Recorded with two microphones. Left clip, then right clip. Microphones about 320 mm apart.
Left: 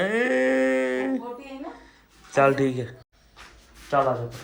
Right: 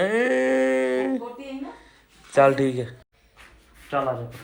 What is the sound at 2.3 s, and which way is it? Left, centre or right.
Speech, centre.